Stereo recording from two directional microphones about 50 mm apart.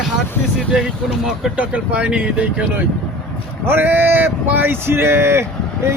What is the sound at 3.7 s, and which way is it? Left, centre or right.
Speech, right.